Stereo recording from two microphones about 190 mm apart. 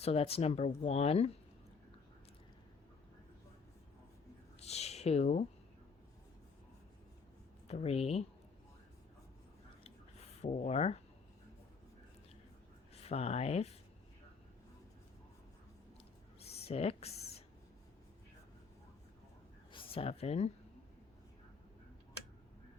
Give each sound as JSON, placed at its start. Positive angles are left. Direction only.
{"t": 0.0, "sound": "speech", "side_deg": 30}
{"t": 4.6, "sound": "a sound", "side_deg": 35}
{"t": 7.7, "sound": "speech", "side_deg": 35}
{"t": 10.4, "sound": "speech", "side_deg": 35}
{"t": 12.9, "sound": "speech", "side_deg": 30}
{"t": 16.4, "sound": "a sound", "side_deg": 30}
{"t": 19.7, "sound": "speech", "side_deg": 30}